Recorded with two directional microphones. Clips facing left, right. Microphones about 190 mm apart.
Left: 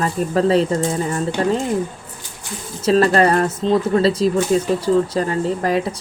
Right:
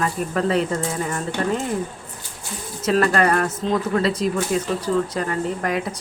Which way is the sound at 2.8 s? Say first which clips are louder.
Left 4 dB; 30° left (ahead or behind).